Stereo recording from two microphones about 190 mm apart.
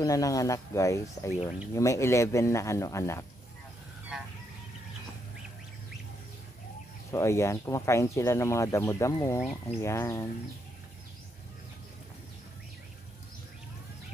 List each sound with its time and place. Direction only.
0.0 s speech: 20° left (ahead or behind)
7.1 s speech: 15° left (ahead or behind)